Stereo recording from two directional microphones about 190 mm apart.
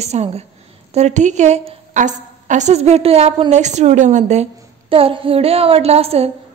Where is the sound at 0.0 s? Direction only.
35° right (ahead or behind).